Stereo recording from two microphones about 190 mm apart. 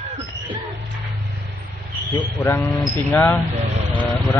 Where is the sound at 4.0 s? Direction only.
10° left (ahead or behind).